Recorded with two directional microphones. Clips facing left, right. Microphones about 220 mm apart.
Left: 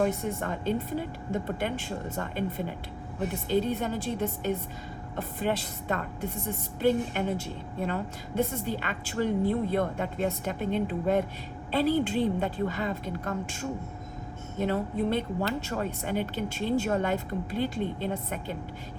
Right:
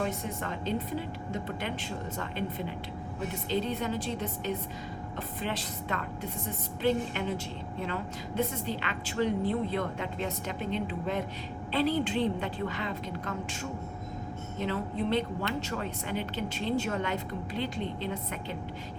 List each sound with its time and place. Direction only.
0.0 s a woman's voice: 50° left (ahead or behind)
5.1 s a woman's voice: 50° left (ahead or behind)